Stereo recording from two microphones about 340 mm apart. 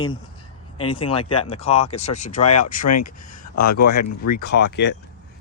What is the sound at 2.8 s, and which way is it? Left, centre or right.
Speech, left.